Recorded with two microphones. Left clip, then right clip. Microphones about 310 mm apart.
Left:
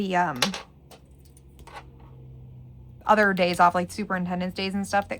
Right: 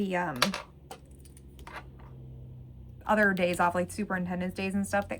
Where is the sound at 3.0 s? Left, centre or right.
Centre.